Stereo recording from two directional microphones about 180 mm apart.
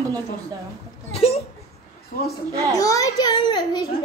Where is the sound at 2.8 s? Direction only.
20° left (ahead or behind).